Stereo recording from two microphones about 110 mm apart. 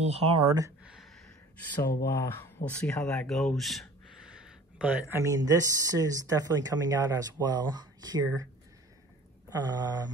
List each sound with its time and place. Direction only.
0.0 s speech: 70° right (ahead or behind)
0.8 s a sound: centre (ahead or behind)
1.8 s speech: 25° left (ahead or behind); by 3.8 s centre (ahead or behind)
4.3 s a sound: 10° right (ahead or behind)
5.1 s speech: 30° right (ahead or behind)
9.6 s speech: 35° right (ahead or behind)